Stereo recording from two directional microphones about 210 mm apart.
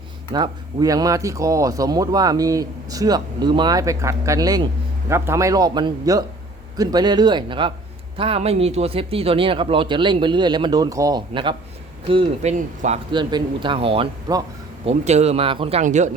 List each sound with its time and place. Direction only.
0.3 s speech: 20° right (ahead or behind)
13.1 s speech: 20° right (ahead or behind)
14.8 s speech: 30° right (ahead or behind)